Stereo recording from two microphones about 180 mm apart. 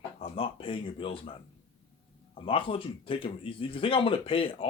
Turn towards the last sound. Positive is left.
turn(degrees=30)  # may be behind; listen again after turning